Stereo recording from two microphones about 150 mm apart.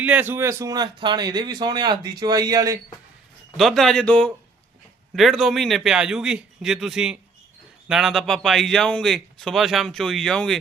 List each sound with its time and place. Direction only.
0.0 s speech: 10° right (ahead or behind)
3.6 s a man's voice: centre (ahead or behind)